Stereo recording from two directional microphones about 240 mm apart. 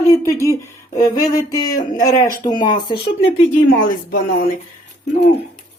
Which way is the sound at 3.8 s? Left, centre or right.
Left.